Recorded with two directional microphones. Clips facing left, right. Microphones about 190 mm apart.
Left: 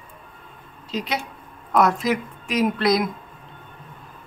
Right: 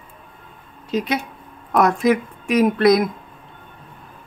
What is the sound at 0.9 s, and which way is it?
Speech, 50° right (ahead or behind).